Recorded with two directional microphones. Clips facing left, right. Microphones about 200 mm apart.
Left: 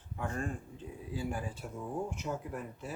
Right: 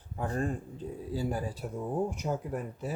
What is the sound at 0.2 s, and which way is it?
Speech, 35° right (ahead or behind).